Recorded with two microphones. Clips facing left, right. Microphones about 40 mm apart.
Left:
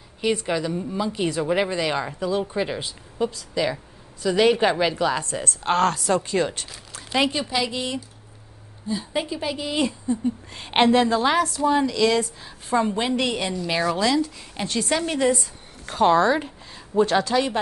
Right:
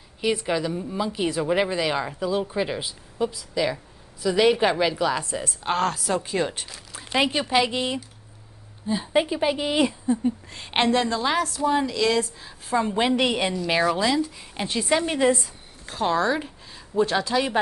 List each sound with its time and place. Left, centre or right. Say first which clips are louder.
0.5 s a woman's voice: even; centre
10.5 s speech: left 5 dB; centre
12.9 s a woman's voice: right 2 dB; centre
15.9 s a woman's voice: left 5 dB; centre